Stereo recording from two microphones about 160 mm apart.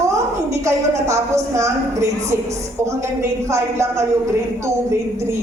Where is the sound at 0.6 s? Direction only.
20° right (ahead or behind).